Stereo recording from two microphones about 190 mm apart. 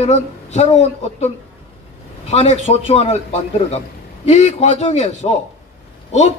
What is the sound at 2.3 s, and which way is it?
A man's voice, 35° left (ahead or behind).